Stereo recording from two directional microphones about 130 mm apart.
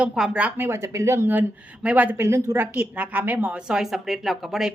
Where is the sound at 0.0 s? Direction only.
10° right (ahead or behind).